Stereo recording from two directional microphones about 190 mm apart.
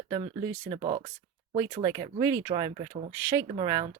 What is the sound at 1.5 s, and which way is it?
Speech, 15° right (ahead or behind).